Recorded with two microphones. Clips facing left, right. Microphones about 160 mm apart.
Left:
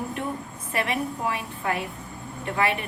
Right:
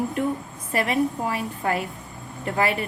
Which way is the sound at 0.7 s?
40° right (ahead or behind).